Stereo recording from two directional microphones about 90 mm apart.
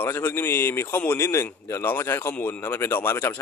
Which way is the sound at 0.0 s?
25° left (ahead or behind).